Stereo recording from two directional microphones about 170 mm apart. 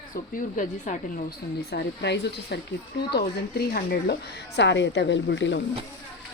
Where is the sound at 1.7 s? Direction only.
85° left.